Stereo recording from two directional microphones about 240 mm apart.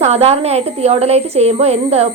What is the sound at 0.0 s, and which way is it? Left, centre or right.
A woman's voice, right.